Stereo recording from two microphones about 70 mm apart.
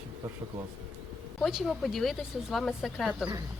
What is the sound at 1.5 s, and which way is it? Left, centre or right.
Speech, centre.